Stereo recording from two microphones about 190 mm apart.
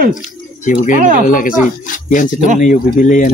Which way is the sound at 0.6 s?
45° left (ahead or behind).